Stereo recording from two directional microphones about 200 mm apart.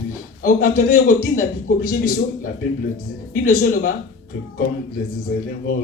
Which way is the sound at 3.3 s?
45° left (ahead or behind).